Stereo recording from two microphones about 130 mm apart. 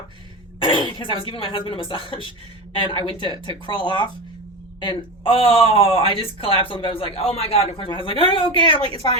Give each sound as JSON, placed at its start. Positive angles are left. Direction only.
{"t": 0.6, "sound": "speech", "side_deg": 40}